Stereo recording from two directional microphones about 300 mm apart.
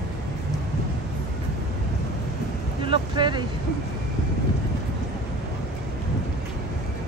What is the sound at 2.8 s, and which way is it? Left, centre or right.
Vehicle, centre.